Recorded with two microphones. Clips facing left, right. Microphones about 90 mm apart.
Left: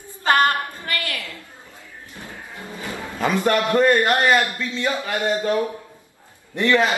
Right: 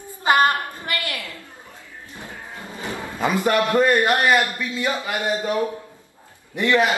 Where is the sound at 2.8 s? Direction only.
20° right (ahead or behind).